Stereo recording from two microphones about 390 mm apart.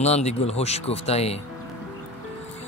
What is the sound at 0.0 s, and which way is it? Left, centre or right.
A man's voice, centre.